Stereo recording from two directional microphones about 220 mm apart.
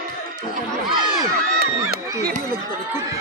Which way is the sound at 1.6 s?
45° right (ahead or behind).